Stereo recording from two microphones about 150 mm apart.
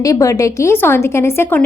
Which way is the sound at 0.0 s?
20° left (ahead or behind).